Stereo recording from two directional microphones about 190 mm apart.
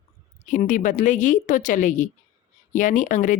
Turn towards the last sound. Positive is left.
turn(degrees=40)  # may be behind; listen again after turning